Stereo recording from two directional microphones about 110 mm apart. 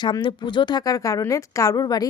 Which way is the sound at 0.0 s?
45° left (ahead or behind).